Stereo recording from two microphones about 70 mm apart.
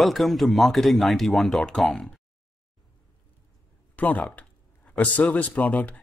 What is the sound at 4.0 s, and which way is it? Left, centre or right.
Speech, left.